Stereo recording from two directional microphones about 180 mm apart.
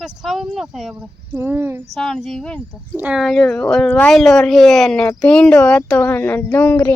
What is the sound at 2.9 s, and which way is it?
Speech, 5° right (ahead or behind).